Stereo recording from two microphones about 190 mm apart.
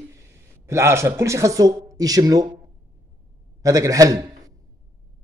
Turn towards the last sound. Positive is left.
turn(degrees=-20)  # may be behind; listen again after turning